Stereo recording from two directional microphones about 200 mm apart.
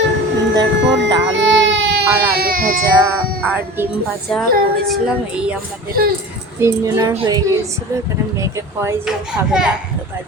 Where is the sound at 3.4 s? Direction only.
10° right (ahead or behind).